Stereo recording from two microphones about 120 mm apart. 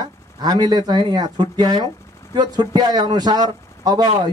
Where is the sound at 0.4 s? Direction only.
35° right (ahead or behind).